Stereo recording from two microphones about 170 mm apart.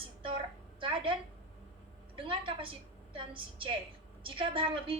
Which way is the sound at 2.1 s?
30° right (ahead or behind).